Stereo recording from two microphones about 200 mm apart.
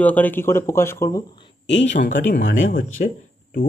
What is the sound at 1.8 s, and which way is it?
Speech, 40° left (ahead or behind).